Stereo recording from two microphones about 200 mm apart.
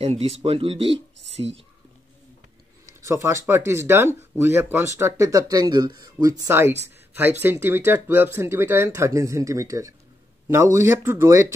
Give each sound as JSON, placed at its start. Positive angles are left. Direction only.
{"t": 0.0, "sound": "speech", "side_deg": -30}
{"t": 3.0, "sound": "speech", "side_deg": -15}